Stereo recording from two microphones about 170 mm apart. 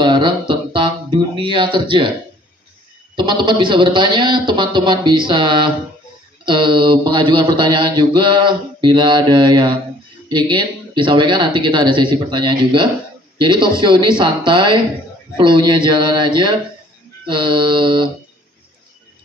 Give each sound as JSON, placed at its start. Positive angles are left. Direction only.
{"t": 0.0, "sound": "music", "side_deg": -25}
{"t": 3.2, "sound": "a man's voice", "side_deg": -30}